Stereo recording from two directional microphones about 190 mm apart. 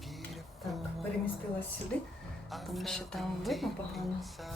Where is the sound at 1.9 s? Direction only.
5° left (ahead or behind).